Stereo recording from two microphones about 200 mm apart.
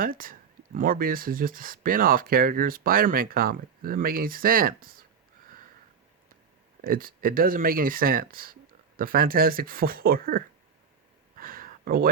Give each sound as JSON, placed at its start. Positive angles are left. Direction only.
{"t": 0.0, "sound": "speech", "side_deg": -45}
{"t": 6.8, "sound": "speech", "side_deg": -45}
{"t": 11.3, "sound": "a sound", "side_deg": -45}